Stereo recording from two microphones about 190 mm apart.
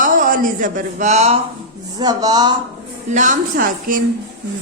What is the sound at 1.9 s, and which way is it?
Speech, 20° right (ahead or behind).